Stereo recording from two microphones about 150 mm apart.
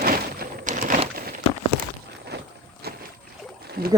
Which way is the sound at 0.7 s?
60° right (ahead or behind).